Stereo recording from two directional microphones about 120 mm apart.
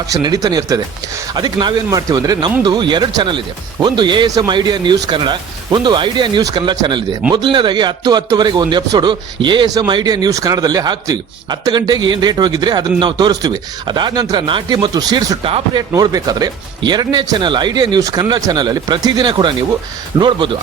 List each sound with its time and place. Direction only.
0.1 s a man's voice: 30° right (ahead or behind)